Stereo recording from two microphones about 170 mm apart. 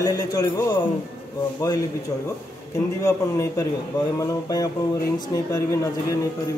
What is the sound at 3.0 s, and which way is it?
A man's voice, 20° left (ahead or behind).